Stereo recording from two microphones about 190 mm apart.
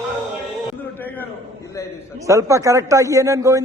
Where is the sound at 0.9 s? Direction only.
10° left (ahead or behind).